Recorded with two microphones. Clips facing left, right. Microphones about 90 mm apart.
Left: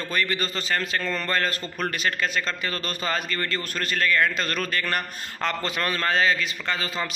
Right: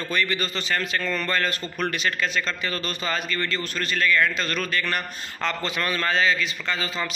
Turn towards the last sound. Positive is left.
turn(degrees=40)  # may be behind; listen again after turning